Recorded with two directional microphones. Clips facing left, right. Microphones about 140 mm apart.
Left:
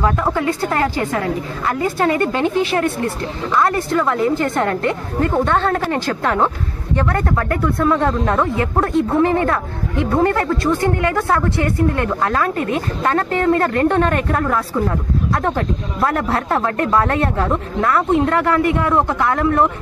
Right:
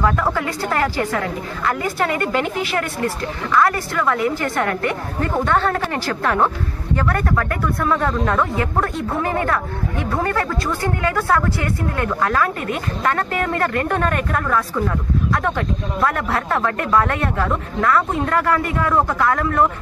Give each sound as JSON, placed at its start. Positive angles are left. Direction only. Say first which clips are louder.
{"t": 0.0, "sound": "speech", "louder": "left 2 dB", "side_deg": 20}